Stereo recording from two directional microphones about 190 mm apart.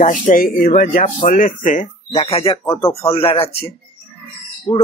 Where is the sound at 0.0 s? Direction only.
40° left (ahead or behind).